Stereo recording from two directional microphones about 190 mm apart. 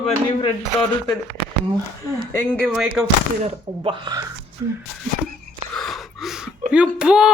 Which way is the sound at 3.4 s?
25° right (ahead or behind).